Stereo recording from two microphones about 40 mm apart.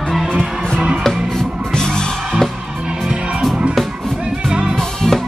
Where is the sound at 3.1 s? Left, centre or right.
Right.